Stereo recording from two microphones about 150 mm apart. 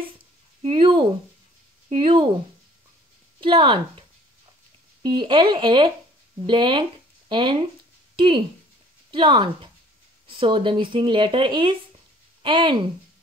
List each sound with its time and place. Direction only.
0.6 s speech: 35° right (ahead or behind)
3.3 s speech: 35° right (ahead or behind)
5.0 s speech: 35° right (ahead or behind)
9.1 s speech: 35° right (ahead or behind)